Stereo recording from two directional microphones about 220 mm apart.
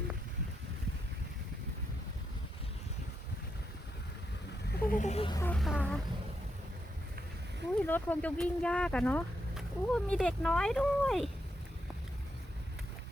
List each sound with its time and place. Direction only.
4.8 s music: 40° left (ahead or behind)
5.4 s speech: 5° left (ahead or behind)
7.8 s speech: 10° left (ahead or behind)